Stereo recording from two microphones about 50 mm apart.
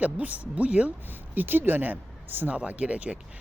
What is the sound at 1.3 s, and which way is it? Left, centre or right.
Speech, right.